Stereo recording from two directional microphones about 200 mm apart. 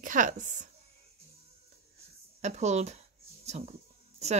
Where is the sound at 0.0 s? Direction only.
40° right (ahead or behind).